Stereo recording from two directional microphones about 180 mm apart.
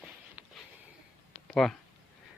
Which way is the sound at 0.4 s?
10° right (ahead or behind).